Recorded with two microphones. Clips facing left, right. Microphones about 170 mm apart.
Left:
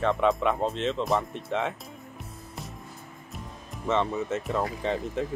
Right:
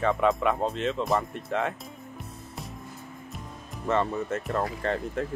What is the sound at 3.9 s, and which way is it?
Speech, centre (ahead or behind).